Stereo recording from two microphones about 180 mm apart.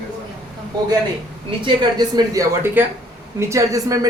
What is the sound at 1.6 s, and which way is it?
Speech, 25° right (ahead or behind).